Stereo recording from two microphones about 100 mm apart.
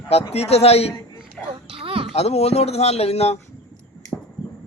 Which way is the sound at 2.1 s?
90° left.